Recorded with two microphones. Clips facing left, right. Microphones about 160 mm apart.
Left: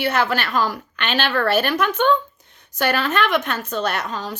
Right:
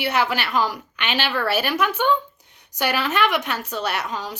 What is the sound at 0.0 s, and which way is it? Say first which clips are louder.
Speech: left 2 dB; 10° right (ahead or behind).